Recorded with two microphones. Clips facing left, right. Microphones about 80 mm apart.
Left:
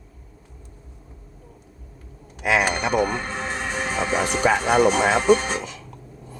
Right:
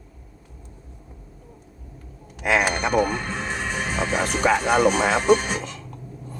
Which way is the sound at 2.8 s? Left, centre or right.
Right.